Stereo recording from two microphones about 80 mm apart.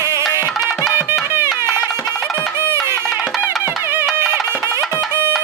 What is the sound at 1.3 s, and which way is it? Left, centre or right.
Music, right.